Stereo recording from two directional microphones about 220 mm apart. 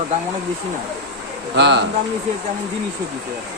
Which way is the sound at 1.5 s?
50° right (ahead or behind).